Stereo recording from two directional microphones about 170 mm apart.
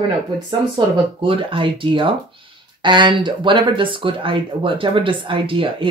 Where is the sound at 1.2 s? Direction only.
30° right (ahead or behind).